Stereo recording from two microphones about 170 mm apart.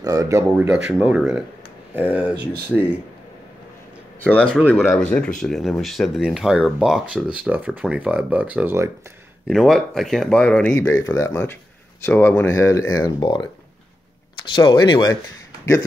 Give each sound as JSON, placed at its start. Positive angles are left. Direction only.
{"t": 0.0, "sound": "speech", "side_deg": -20}
{"t": 4.2, "sound": "speech", "side_deg": 5}
{"t": 9.5, "sound": "speech", "side_deg": 0}
{"t": 14.5, "sound": "speech", "side_deg": 30}